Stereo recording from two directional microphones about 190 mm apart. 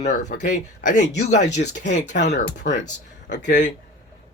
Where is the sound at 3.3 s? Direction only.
70° left (ahead or behind).